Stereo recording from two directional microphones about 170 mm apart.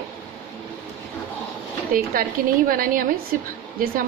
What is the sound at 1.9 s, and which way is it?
A woman's voice, 55° right (ahead or behind).